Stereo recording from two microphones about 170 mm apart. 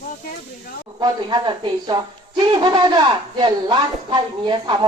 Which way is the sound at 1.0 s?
25° right (ahead or behind).